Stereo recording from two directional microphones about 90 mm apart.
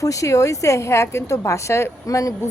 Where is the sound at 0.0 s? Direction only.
40° left (ahead or behind).